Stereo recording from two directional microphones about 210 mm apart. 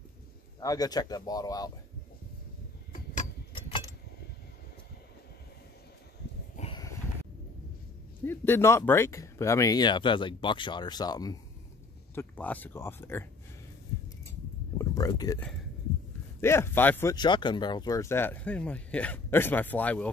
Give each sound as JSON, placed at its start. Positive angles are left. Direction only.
{"t": 0.6, "sound": "speech", "side_deg": 15}
{"t": 2.9, "sound": "clock", "side_deg": 35}
{"t": 6.5, "sound": "a sound", "side_deg": 30}
{"t": 8.3, "sound": "speech", "side_deg": 10}
{"t": 12.2, "sound": "speech", "side_deg": 10}
{"t": 14.8, "sound": "speech", "side_deg": 15}
{"t": 16.3, "sound": "speech", "side_deg": 10}